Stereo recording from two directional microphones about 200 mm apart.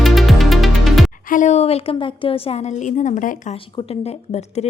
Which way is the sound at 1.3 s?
40° left (ahead or behind).